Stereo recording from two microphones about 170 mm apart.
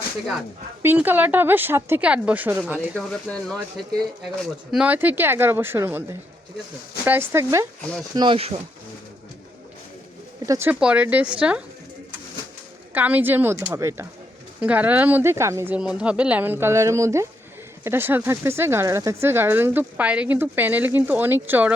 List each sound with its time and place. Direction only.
0.8 s speech: 10° right (ahead or behind)
2.9 s speech: 5° left (ahead or behind)
4.4 s speech: 5° right (ahead or behind)
8.1 s speech: 30° right (ahead or behind)
10.4 s speech: 15° right (ahead or behind)
12.9 s speech: 10° right (ahead or behind)